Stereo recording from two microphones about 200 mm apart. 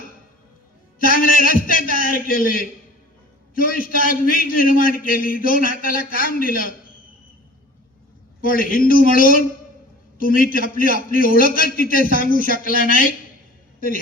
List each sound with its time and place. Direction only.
1.0 s a man's voice: 45° left (ahead or behind)
8.4 s a man's voice: 45° left (ahead or behind)